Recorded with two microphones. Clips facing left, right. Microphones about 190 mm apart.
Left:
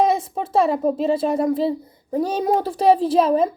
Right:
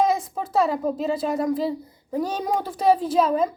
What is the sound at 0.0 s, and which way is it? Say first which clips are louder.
A woman's voice: left 3 dB; 25° left (ahead or behind).